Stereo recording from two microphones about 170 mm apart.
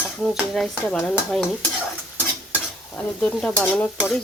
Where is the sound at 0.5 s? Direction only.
Centre (ahead or behind).